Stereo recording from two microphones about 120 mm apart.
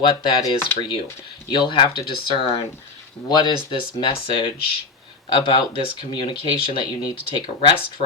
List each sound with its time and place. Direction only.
0.0 s speech: 45° left (ahead or behind)